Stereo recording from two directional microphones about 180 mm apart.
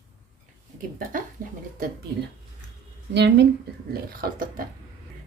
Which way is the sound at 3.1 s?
70° right (ahead or behind).